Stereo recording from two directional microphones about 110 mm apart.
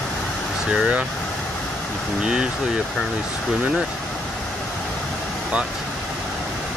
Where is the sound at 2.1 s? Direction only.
5° right (ahead or behind).